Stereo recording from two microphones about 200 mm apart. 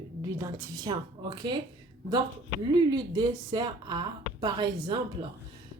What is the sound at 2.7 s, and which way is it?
Speech, 20° right (ahead or behind).